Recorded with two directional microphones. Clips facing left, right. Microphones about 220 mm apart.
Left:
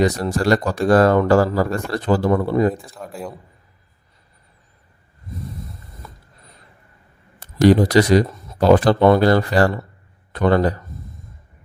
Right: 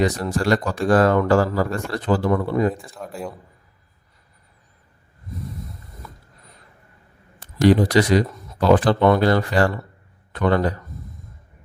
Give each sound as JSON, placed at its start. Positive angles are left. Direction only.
{"t": 0.0, "sound": "speech", "side_deg": 40}
{"t": 2.8, "sound": "speech", "side_deg": 0}
{"t": 7.3, "sound": "a man's voice", "side_deg": 40}